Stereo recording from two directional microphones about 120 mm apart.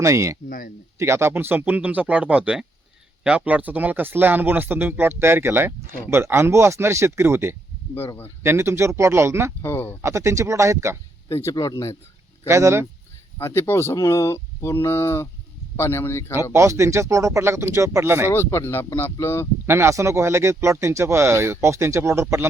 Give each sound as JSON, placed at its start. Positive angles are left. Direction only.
{"t": 0.0, "sound": "speech", "side_deg": -25}
{"t": 7.9, "sound": "speech", "side_deg": 15}
{"t": 8.4, "sound": "speech", "side_deg": -20}
{"t": 9.6, "sound": "speech", "side_deg": 20}
{"t": 10.0, "sound": "speech", "side_deg": -25}
{"t": 11.3, "sound": "speech", "side_deg": 25}
{"t": 11.5, "sound": "speech", "side_deg": 35}
{"t": 12.5, "sound": "speech", "side_deg": -25}
{"t": 13.4, "sound": "speech", "side_deg": 20}
{"t": 16.3, "sound": "speech", "side_deg": -20}
{"t": 18.3, "sound": "speech", "side_deg": 20}
{"t": 19.6, "sound": "speech", "side_deg": -20}